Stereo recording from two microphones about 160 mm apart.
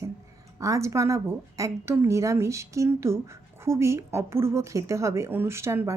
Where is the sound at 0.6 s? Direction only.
20° right (ahead or behind).